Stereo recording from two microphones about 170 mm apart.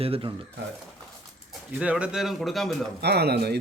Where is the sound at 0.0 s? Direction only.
35° right (ahead or behind).